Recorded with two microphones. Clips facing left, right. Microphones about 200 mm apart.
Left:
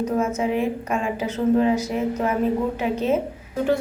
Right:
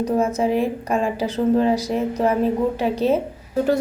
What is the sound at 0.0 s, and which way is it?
A woman's voice, 35° right (ahead or behind).